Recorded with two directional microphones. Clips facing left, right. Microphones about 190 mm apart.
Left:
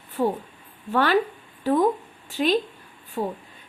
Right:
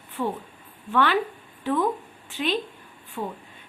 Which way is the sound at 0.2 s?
40° left (ahead or behind).